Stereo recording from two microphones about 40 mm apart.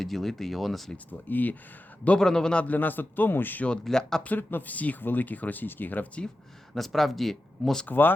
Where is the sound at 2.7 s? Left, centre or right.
Left.